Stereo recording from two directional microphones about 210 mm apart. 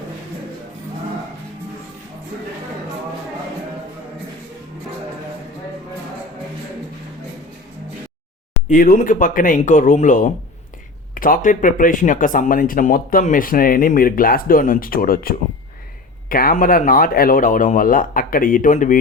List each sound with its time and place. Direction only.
8.6 s speech: 40° left (ahead or behind)